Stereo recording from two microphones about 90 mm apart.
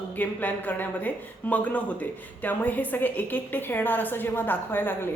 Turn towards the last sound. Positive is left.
turn(degrees=20)  # may be behind; listen again after turning